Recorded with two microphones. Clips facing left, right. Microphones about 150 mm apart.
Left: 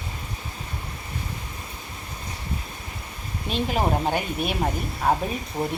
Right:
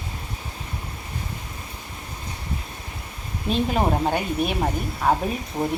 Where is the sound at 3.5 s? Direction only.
Centre (ahead or behind).